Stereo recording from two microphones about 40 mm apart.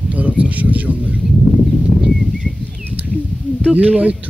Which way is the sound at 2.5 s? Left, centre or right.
Centre.